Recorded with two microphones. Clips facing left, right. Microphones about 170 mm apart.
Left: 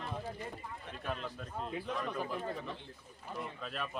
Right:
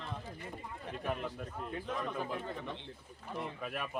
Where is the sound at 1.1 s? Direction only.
15° right (ahead or behind).